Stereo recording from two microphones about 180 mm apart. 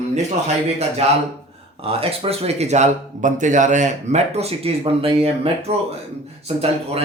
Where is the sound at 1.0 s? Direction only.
35° right (ahead or behind).